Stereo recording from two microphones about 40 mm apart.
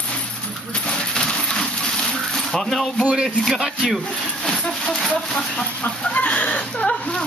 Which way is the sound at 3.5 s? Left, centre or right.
Centre.